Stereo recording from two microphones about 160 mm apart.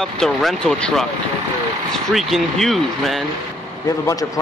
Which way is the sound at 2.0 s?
Centre (ahead or behind).